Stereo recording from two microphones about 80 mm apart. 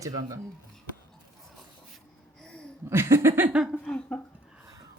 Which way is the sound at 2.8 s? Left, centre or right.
Right.